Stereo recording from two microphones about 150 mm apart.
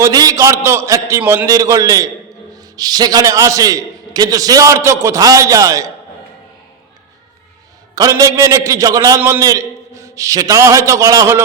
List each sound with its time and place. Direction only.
0.0 s a man's voice: 25° right (ahead or behind)
7.9 s a man's voice: 25° right (ahead or behind)